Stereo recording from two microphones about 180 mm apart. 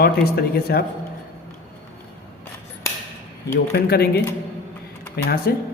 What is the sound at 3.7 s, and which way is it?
Speech, 60° left (ahead or behind).